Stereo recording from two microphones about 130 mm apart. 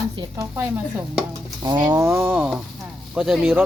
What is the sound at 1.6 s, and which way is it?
Speech, 30° right (ahead or behind).